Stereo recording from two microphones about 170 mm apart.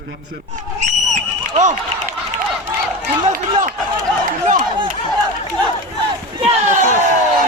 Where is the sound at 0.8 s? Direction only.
45° right (ahead or behind).